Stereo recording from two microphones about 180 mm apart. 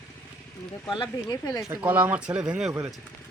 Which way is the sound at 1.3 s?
20° left (ahead or behind).